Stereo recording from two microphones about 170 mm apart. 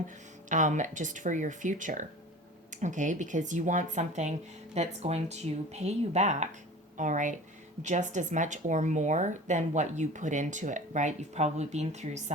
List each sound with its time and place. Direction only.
0.4 s speech: 50° right (ahead or behind)